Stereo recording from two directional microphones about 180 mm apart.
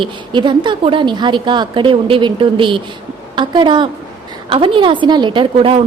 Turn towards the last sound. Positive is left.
turn(degrees=-30)  # may be behind; listen again after turning